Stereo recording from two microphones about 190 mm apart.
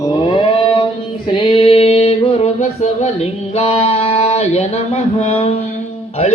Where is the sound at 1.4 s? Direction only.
30° left (ahead or behind).